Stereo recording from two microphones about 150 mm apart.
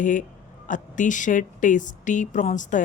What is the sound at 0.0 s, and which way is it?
Speech, 60° left (ahead or behind).